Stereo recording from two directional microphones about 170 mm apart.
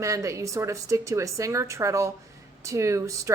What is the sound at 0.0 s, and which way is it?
A woman's voice, 20° right (ahead or behind).